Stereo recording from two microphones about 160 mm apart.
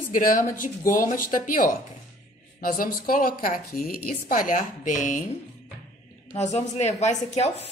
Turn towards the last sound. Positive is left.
turn(degrees=40)  # may be behind; listen again after turning